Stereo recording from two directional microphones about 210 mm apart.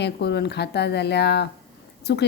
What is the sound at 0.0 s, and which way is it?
A woman's voice, 50° left (ahead or behind).